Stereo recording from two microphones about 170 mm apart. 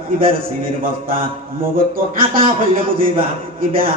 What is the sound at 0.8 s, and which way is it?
Music, 55° right (ahead or behind).